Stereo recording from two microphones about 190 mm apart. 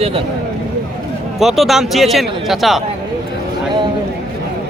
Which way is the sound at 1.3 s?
Centre (ahead or behind).